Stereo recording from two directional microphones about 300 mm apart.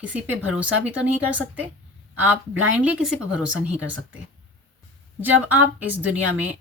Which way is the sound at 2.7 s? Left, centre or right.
Centre.